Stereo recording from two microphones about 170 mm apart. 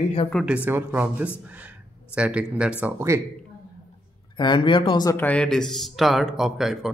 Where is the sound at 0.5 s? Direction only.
10° right (ahead or behind).